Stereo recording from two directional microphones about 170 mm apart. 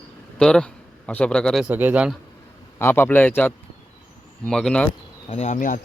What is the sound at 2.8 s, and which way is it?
Speech, 15° left (ahead or behind).